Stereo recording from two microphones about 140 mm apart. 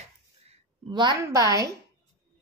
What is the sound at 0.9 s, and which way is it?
Speech, 30° right (ahead or behind).